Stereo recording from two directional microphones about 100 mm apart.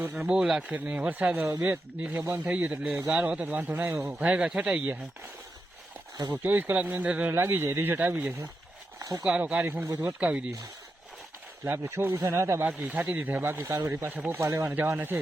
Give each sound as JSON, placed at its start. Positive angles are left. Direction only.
{"t": 0.2, "sound": "speech", "side_deg": -5}
{"t": 6.3, "sound": "speech", "side_deg": -20}
{"t": 9.0, "sound": "a sound", "side_deg": -35}
{"t": 9.4, "sound": "speech", "side_deg": -15}
{"t": 11.8, "sound": "speech", "side_deg": -25}
{"t": 12.6, "sound": "speech", "side_deg": -15}
{"t": 14.7, "sound": "speech", "side_deg": -15}